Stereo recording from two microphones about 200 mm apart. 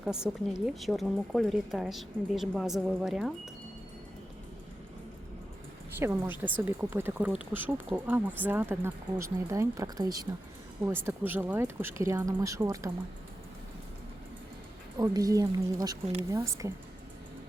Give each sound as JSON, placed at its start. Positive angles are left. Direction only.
{"t": 0.0, "sound": "speech", "side_deg": -5}
{"t": 6.0, "sound": "speech", "side_deg": -10}
{"t": 14.9, "sound": "speech", "side_deg": -15}